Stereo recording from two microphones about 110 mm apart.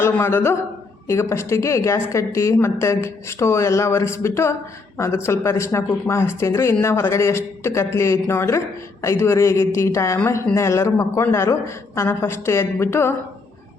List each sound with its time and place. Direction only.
0.0 s a woman's voice: 20° left (ahead or behind)